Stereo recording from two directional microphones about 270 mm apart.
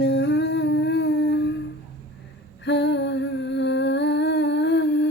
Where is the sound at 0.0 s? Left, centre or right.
Left.